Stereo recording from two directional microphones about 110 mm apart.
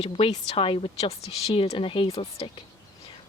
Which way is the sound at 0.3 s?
65° left (ahead or behind).